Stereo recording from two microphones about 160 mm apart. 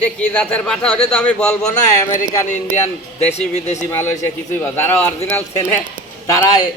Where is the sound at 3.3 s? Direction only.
45° left (ahead or behind).